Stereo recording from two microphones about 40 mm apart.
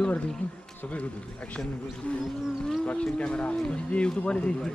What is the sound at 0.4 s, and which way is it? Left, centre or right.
Speech, left.